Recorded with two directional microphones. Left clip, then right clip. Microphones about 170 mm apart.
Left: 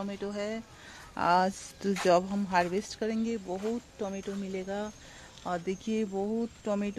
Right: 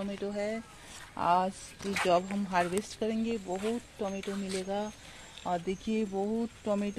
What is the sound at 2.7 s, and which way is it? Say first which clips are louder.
Speech: even; 5° left (ahead or behind).